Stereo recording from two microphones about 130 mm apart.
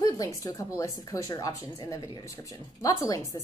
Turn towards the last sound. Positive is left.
turn(degrees=25)  # may be behind; listen again after turning